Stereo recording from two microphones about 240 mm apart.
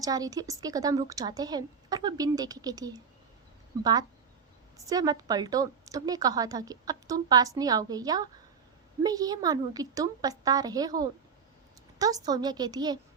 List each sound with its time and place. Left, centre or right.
0.0 s a woman's voice: centre
4.9 s a woman's voice: centre